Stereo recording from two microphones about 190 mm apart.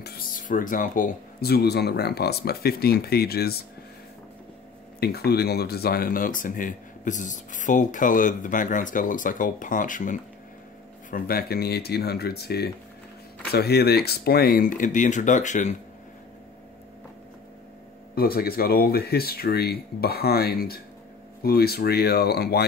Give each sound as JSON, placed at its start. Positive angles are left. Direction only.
{"t": 0.0, "sound": "speech", "side_deg": 45}
{"t": 5.0, "sound": "speech", "side_deg": 55}
{"t": 18.1, "sound": "speech", "side_deg": 50}